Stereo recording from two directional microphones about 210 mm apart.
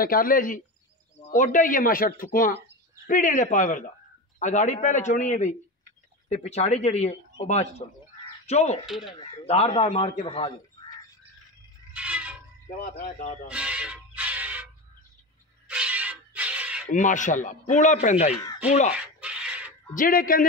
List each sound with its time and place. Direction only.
0.0 s speech: 40° left (ahead or behind)
8.8 s speech: centre (ahead or behind)
9.2 s a man's voice: 30° left (ahead or behind)
11.9 s a sound: 5° right (ahead or behind)
12.7 s speech: 45° left (ahead or behind)
13.5 s cat: 5° right (ahead or behind)
15.7 s music: 5° right (ahead or behind)
16.9 s speech: 35° left (ahead or behind)
19.1 s a sound: 5° right (ahead or behind)
19.9 s speech: 40° left (ahead or behind)